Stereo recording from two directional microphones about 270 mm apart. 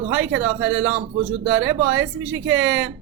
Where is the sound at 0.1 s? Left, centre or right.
Right.